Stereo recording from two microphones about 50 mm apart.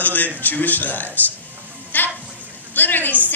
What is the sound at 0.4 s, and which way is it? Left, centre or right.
Speech, left.